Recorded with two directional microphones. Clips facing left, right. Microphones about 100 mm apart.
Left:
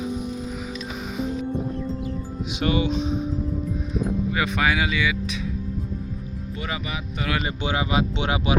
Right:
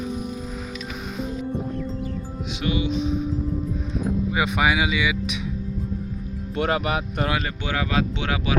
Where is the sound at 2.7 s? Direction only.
40° left (ahead or behind).